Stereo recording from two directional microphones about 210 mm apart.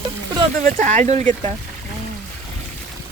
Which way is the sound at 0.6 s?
35° right (ahead or behind).